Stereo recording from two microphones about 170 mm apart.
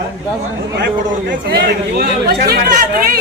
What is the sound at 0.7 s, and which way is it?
A man's voice, 90° right.